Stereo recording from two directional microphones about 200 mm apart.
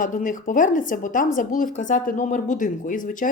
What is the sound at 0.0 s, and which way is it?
Speech, 40° left (ahead or behind).